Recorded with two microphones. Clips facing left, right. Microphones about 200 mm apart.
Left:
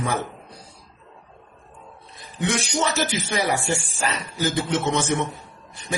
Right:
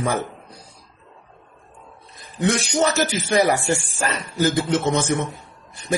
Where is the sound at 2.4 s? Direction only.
45° right (ahead or behind).